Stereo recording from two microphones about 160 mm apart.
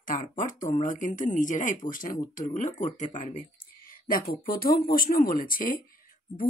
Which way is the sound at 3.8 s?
60° left (ahead or behind).